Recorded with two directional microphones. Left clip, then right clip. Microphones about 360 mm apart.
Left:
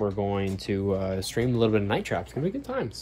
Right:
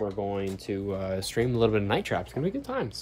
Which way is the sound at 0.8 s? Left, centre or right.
Centre.